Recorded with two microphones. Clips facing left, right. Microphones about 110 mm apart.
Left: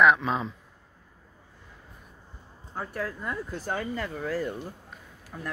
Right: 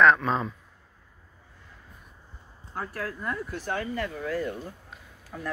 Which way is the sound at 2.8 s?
20° left (ahead or behind).